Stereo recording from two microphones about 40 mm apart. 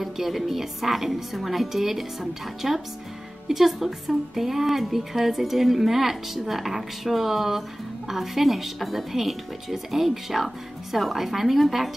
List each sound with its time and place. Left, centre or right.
0.0 s a woman's voice: centre